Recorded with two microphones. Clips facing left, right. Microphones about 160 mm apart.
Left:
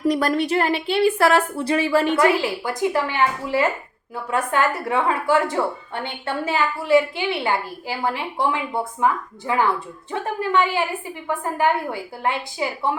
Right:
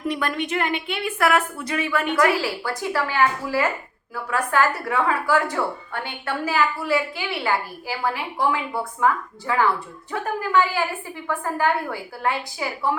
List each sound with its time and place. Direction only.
0.0 s a woman's voice: 35° left (ahead or behind)